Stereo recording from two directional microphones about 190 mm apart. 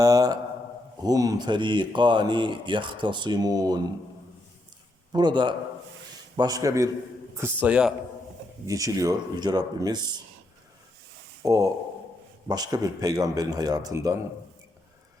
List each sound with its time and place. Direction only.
0.0 s mantra: 20° right (ahead or behind)
1.0 s speech: 20° right (ahead or behind)
5.1 s a man's voice: 25° right (ahead or behind)
7.6 s a man's voice: 5° right (ahead or behind)
8.6 s speech: 15° right (ahead or behind)
11.4 s a man's voice: 15° right (ahead or behind)